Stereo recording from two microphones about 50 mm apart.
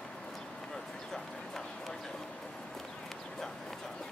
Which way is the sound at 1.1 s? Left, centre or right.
Centre.